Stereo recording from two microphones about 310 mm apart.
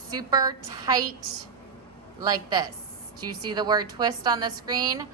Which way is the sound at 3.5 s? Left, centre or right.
Centre.